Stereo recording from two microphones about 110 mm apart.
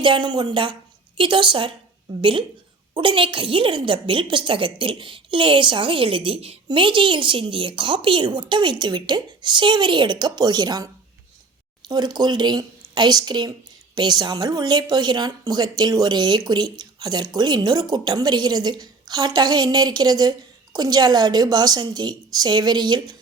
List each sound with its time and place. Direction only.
0.0 s speech: 45° right (ahead or behind)
2.9 s a woman's voice: 50° right (ahead or behind)
6.7 s a woman's voice: 50° right (ahead or behind)
11.9 s speech: 40° right (ahead or behind)